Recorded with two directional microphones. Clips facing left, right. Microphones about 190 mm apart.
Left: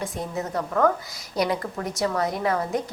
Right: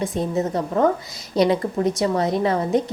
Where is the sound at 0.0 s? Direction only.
25° right (ahead or behind).